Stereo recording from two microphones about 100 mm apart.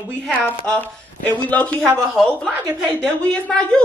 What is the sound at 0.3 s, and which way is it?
Speech, 15° right (ahead or behind).